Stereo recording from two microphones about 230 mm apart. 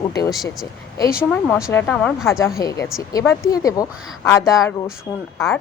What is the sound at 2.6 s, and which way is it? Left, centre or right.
Speech, centre.